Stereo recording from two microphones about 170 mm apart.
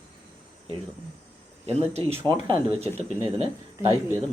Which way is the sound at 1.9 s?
35° right (ahead or behind).